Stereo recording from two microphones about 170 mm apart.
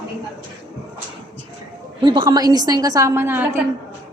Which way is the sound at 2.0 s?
30° right (ahead or behind).